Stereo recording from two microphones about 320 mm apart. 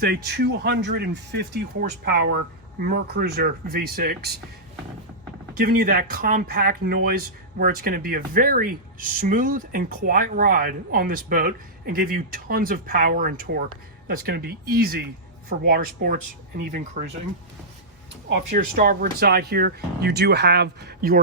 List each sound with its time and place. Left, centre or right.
0.0 s speech: right
5.5 s speech: right
18.5 s speech: right